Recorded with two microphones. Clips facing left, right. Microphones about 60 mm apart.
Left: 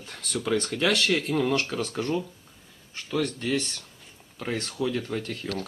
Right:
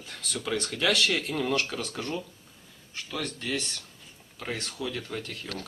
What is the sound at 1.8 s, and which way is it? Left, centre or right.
Speech, left.